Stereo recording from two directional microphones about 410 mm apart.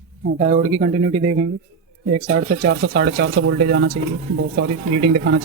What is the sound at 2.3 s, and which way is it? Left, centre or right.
Speech, right.